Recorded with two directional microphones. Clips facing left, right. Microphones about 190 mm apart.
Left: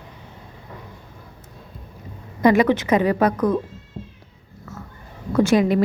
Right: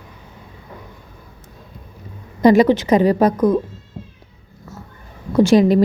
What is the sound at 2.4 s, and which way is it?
Speech, 35° right (ahead or behind).